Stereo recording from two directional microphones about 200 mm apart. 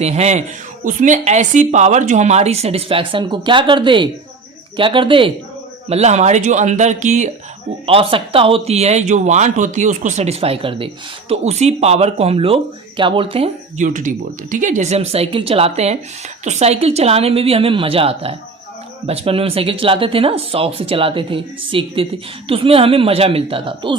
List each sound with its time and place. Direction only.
0.0 s a woman's voice: 35° right (ahead or behind)